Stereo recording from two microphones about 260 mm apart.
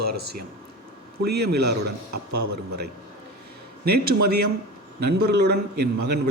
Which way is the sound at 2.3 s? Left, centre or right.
Right.